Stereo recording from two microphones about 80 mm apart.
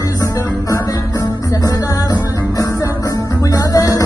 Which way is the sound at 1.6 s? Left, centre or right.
Left.